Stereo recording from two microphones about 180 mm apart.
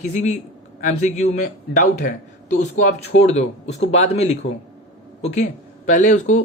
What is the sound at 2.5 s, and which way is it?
Speech, 45° left (ahead or behind).